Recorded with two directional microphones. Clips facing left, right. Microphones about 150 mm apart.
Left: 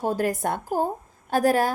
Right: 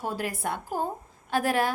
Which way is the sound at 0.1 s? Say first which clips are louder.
Left 6 dB; 45° left (ahead or behind).